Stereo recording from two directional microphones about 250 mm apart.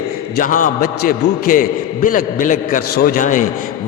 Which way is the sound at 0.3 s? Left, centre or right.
Left.